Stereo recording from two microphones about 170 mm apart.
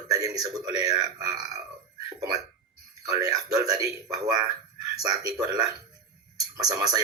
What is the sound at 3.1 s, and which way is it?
A man's voice, 20° right (ahead or behind).